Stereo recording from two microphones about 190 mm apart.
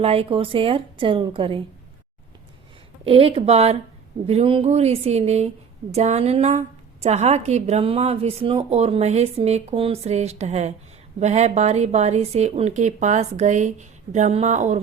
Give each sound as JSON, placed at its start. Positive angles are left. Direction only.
{"t": 0.0, "sound": "a woman's voice", "side_deg": -30}
{"t": 3.0, "sound": "a woman's voice", "side_deg": -30}